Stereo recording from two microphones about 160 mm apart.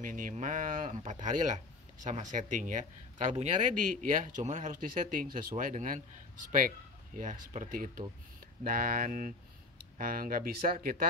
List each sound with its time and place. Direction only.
0.0 s speech: 55° right (ahead or behind)